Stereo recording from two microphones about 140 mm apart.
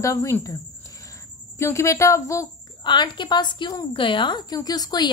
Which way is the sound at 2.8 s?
35° left (ahead or behind).